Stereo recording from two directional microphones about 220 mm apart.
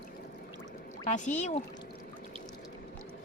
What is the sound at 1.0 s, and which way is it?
Speech, 35° left (ahead or behind).